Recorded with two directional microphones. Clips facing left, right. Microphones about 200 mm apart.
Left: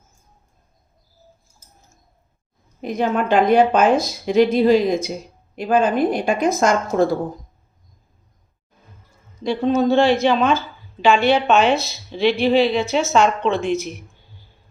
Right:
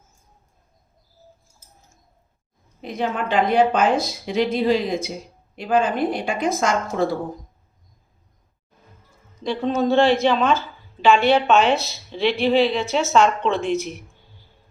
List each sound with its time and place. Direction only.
2.8 s a woman's voice: 45° left (ahead or behind)
9.4 s a woman's voice: centre (ahead or behind)